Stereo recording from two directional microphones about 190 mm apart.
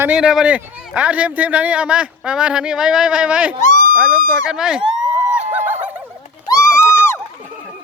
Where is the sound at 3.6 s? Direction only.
40° left (ahead or behind).